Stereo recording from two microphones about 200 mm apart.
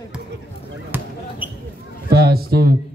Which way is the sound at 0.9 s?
10° right (ahead or behind).